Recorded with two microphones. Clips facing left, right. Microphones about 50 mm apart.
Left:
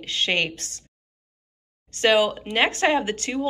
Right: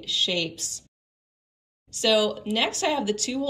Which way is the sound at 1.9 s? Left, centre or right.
Left.